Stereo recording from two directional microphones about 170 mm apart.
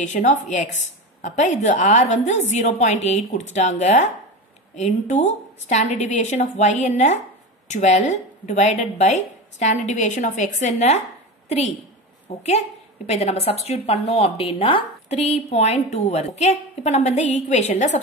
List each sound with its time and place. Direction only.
0.0 s a woman's voice: 45° left (ahead or behind)